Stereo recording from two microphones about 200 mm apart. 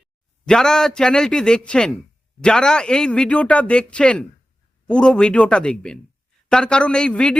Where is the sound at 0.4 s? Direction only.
5° left (ahead or behind).